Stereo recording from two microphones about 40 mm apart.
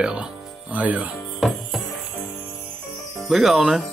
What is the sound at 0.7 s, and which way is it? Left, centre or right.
Speech, right.